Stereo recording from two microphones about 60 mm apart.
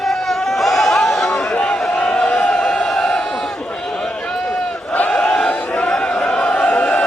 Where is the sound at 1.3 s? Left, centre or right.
Left.